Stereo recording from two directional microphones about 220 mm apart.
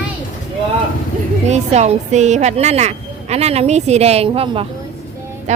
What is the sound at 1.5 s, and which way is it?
A woman's voice, 30° right (ahead or behind).